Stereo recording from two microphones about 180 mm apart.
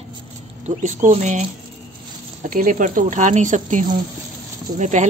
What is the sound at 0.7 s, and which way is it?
Speech, 40° right (ahead or behind).